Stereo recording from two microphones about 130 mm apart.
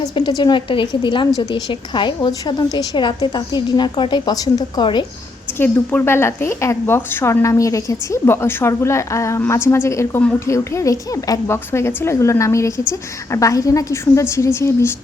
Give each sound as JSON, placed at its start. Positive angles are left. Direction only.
{"t": 0.0, "sound": "a woman's voice", "side_deg": 35}
{"t": 5.5, "sound": "a woman's voice", "side_deg": 15}